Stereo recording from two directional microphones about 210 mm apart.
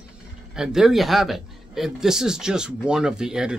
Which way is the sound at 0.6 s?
Centre (ahead or behind).